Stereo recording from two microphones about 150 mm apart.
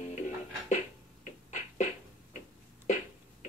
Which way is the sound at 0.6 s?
50° left (ahead or behind).